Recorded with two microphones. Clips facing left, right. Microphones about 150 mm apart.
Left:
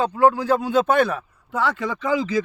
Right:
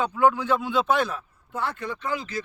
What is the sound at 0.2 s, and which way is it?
A man's voice, 35° left (ahead or behind).